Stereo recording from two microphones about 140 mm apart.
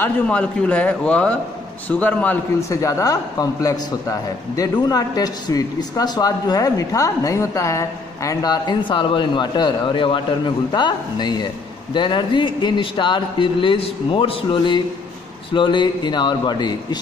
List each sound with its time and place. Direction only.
0.0 s a man's voice: 10° left (ahead or behind)
2.7 s a man's voice: 25° left (ahead or behind)